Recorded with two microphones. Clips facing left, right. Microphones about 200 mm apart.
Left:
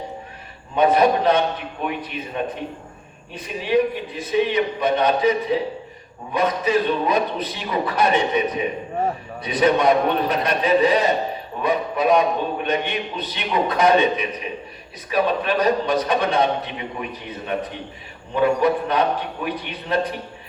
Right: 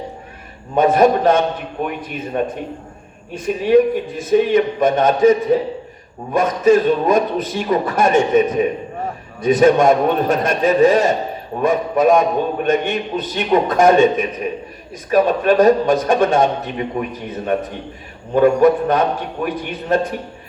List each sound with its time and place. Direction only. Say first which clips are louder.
0.8 s a man's voice: right 4 dB; 45° right (ahead or behind)